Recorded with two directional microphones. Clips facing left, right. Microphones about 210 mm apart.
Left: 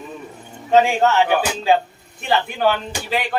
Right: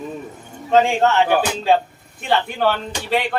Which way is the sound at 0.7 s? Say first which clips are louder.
Even; centre (ahead or behind).